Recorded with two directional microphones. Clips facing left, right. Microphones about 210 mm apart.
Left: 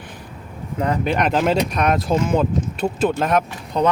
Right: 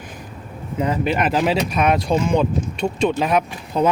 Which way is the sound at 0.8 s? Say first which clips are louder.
Even; 5° right (ahead or behind).